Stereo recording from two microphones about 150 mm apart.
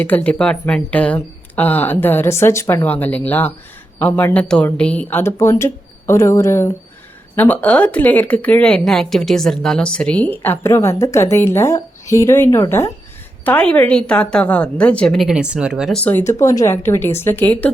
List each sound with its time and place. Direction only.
0.0 s speech: 10° left (ahead or behind)
16.0 s speech: 10° left (ahead or behind)